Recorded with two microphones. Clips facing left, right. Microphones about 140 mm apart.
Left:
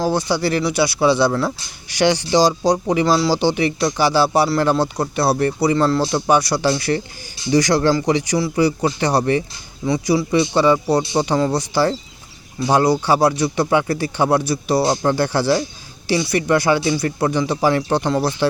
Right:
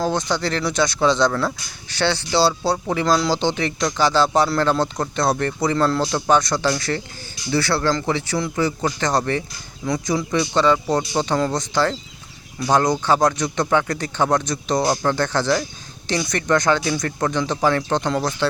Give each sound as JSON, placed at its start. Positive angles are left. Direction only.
{"t": 0.0, "sound": "speech", "side_deg": 10}
{"t": 6.1, "sound": "speech", "side_deg": 15}
{"t": 10.3, "sound": "speech", "side_deg": 15}